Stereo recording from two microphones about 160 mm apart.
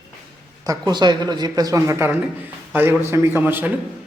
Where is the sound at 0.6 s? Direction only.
25° right (ahead or behind).